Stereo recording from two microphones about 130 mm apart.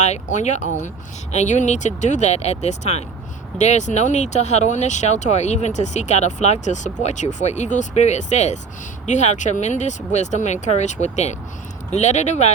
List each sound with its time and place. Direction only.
0.0 s speech: 65° left (ahead or behind)